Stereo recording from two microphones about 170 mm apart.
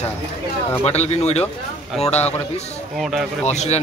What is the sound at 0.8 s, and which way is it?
Speech, 40° left (ahead or behind).